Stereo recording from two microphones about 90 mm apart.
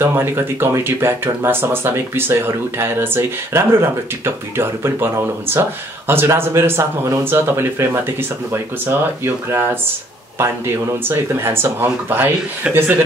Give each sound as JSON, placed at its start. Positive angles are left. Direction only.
{"t": 0.0, "sound": "speech", "side_deg": -25}